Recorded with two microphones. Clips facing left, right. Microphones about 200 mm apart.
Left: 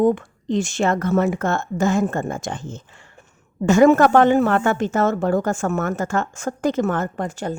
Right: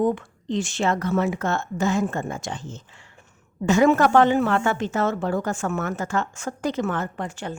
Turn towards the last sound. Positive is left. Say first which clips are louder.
# left 5 dB
turn(degrees=40)  # may be behind; listen again after turning